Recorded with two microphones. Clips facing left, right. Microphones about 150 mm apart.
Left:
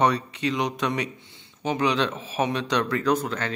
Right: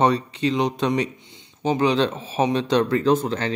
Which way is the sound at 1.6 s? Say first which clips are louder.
Right 4 dB; 30° right (ahead or behind).